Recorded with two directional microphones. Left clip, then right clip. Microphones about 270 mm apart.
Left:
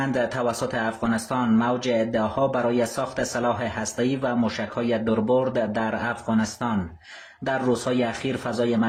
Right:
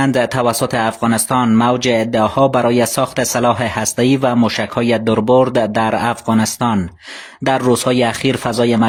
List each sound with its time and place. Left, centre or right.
0.0 s speech: right